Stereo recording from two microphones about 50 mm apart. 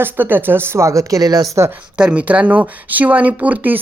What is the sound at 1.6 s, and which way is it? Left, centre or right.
Speech, right.